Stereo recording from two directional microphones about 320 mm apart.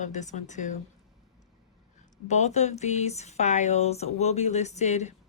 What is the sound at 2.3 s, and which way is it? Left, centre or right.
Speech, left.